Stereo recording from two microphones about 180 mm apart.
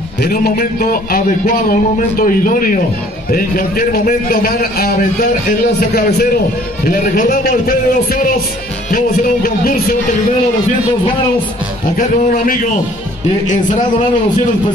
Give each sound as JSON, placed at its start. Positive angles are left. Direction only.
{"t": 0.2, "sound": "a man's voice", "side_deg": 60}
{"t": 13.5, "sound": "a man's voice", "side_deg": 45}